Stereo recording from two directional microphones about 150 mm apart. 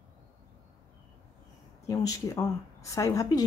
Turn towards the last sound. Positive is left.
turn(degrees=20)  # may be behind; listen again after turning